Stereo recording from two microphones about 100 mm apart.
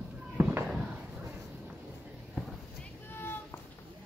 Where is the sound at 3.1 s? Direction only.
20° left (ahead or behind).